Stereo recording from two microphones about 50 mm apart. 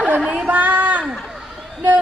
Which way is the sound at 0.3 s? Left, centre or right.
Right.